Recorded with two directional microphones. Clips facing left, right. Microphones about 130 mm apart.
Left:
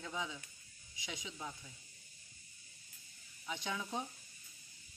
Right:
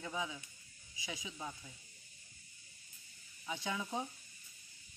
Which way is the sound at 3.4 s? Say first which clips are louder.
Right 1 dB; 15° right (ahead or behind).